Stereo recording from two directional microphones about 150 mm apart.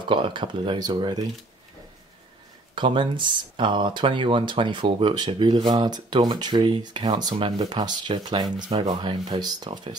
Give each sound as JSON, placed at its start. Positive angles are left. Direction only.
{"t": 0.1, "sound": "speech", "side_deg": -35}
{"t": 2.7, "sound": "speech", "side_deg": -35}